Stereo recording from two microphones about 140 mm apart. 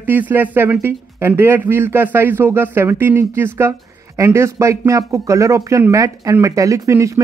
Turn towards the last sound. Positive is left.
turn(degrees=-20)  # may be behind; listen again after turning